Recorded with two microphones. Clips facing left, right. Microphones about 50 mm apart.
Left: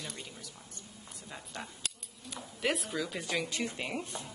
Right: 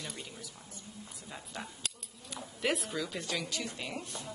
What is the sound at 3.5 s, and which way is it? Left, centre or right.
Speech, left.